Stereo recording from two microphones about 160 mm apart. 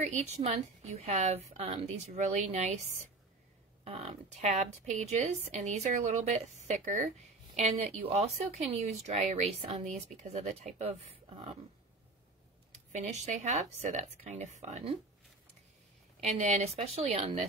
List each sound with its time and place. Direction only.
0.0 s a woman's voice: 45° right (ahead or behind)
12.9 s a woman's voice: 45° right (ahead or behind)
16.2 s a woman's voice: 45° right (ahead or behind)